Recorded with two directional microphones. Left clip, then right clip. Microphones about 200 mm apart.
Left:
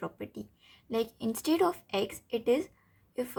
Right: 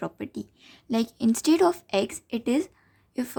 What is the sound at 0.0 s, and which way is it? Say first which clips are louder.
A woman's voice: right 6 dB; 40° right (ahead or behind).